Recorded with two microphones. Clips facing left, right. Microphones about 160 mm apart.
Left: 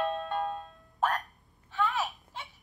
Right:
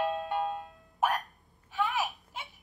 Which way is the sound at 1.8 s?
20° right (ahead or behind).